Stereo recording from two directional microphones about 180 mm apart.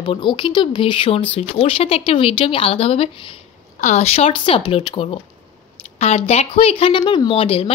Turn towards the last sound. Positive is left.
turn(degrees=30)  # may be behind; listen again after turning